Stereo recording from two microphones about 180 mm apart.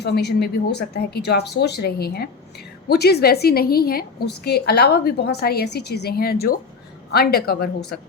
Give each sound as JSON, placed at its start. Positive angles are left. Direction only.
{"t": 0.0, "sound": "a woman's voice", "side_deg": 65}